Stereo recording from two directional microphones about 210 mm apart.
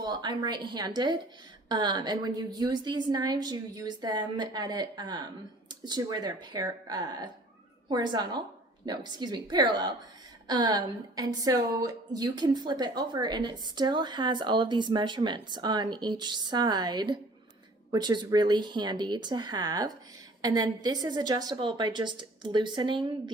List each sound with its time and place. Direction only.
0.0 s a woman's voice: 20° right (ahead or behind)